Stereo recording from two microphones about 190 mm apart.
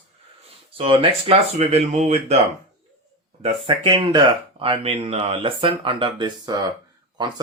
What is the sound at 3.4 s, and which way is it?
Speech, 25° right (ahead or behind).